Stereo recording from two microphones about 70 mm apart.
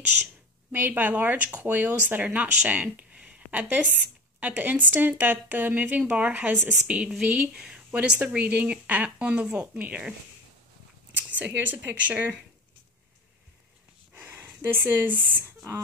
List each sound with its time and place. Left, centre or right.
0.2 s speech: right
11.1 s speech: right
14.1 s a sound: right